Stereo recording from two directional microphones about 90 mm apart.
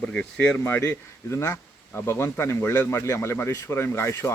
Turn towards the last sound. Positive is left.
turn(degrees=30)  # may be behind; listen again after turning